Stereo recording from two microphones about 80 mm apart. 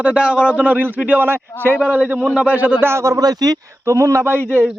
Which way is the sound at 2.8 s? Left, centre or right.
Right.